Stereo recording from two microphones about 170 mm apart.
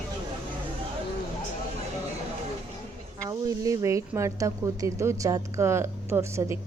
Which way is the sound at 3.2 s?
20° right (ahead or behind).